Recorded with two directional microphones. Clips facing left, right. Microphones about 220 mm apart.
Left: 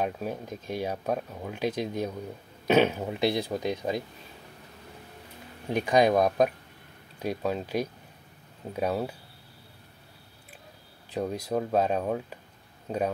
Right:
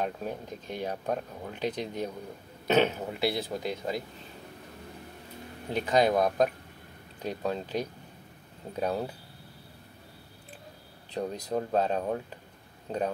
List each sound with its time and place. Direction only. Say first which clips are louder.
0.7 s speech: left 2 dB; 10° left (ahead or behind)
5.7 s speech: left 2 dB; 15° left (ahead or behind)
11.1 s speech: left 2 dB; 10° left (ahead or behind)